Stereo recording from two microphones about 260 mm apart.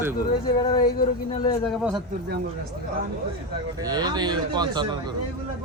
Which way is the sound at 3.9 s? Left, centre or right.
Centre.